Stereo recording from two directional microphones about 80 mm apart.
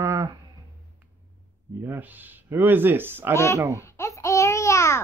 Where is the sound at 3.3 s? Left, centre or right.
Left.